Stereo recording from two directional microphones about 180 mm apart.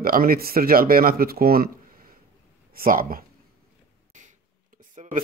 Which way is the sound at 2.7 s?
50° right (ahead or behind).